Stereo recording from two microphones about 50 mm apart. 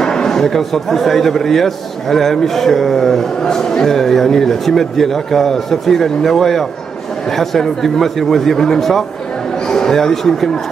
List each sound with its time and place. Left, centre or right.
0.0 s speech: centre